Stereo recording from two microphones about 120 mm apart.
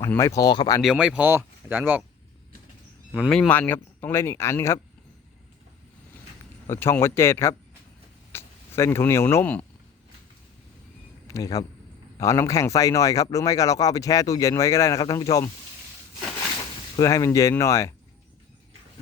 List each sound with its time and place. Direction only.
0.2 s speech: 30° left (ahead or behind)
0.8 s speech: 5° right (ahead or behind)
1.3 s speech: 20° right (ahead or behind)
3.2 s speech: 5° left (ahead or behind)
6.7 s speech: 20° left (ahead or behind)
11.3 s speech: 30° left (ahead or behind)
17.0 s speech: 30° left (ahead or behind)